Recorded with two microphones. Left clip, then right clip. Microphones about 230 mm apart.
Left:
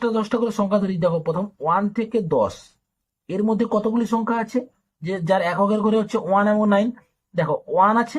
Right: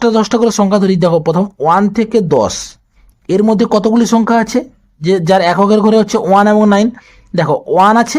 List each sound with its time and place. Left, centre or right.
0.0 s speech: right